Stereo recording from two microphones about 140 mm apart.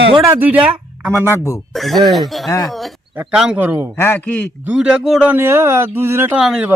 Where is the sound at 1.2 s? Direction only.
20° left (ahead or behind).